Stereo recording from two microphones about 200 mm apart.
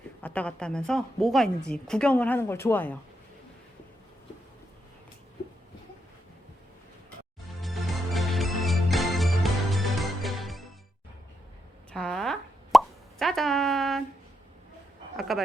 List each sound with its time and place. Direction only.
0.2 s a woman's voice: 5° left (ahead or behind)
7.4 s music: centre (ahead or behind)
11.9 s plop: 5° left (ahead or behind)
15.1 s a sound: centre (ahead or behind)